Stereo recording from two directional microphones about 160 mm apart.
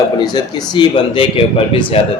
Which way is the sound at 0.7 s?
30° left (ahead or behind).